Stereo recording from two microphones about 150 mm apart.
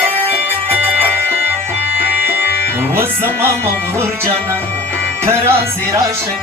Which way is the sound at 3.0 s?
15° right (ahead or behind).